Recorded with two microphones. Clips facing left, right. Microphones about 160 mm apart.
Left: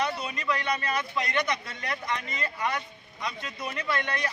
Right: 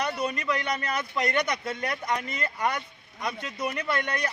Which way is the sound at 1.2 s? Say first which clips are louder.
Right 6 dB; 50° right (ahead or behind).